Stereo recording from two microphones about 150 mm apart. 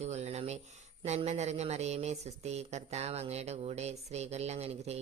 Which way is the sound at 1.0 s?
45° right (ahead or behind).